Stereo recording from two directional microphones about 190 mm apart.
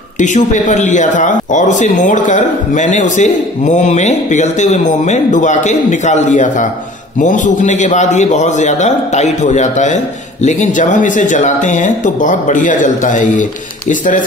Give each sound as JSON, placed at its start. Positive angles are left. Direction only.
{"t": 0.2, "sound": "a man's voice", "side_deg": 40}